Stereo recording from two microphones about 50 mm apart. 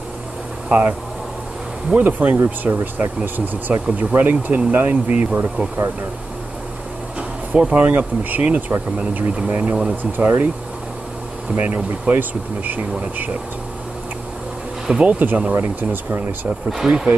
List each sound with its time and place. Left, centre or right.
0.7 s speech: right
2.0 s speech: right
7.2 s air conditioning: right
7.8 s speech: right
10.1 s speech: right
11.5 s speech: right
15.0 s speech: right
16.8 s speech: centre